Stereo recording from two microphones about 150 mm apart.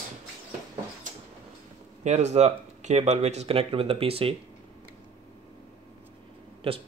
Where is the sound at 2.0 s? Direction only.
50° right (ahead or behind).